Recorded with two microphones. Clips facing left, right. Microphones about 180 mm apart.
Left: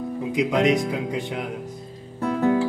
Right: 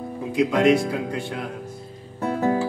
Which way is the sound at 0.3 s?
20° left (ahead or behind).